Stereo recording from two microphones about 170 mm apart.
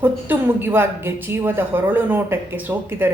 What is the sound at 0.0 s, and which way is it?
Speech, 10° right (ahead or behind).